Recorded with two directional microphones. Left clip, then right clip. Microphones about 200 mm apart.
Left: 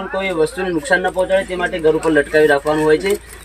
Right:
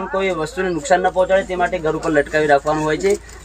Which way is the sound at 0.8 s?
15° right (ahead or behind).